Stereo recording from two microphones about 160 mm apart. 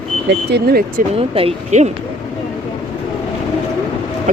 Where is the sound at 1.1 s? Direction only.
35° right (ahead or behind).